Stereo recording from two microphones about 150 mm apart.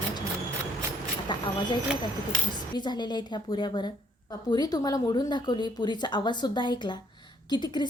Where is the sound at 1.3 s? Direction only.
30° left (ahead or behind).